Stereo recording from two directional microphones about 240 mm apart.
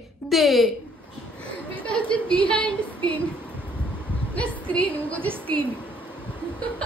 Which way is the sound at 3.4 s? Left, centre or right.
Centre.